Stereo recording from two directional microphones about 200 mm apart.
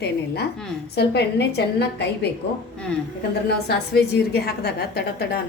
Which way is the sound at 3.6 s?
55° left (ahead or behind).